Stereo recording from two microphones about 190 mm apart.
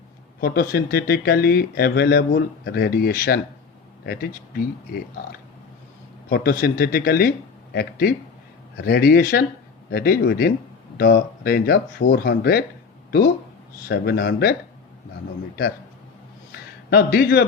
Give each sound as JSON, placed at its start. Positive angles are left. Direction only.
{"t": 0.3, "sound": "speech", "side_deg": 55}
{"t": 6.2, "sound": "speech", "side_deg": 55}
{"t": 16.5, "sound": "a sound", "side_deg": 55}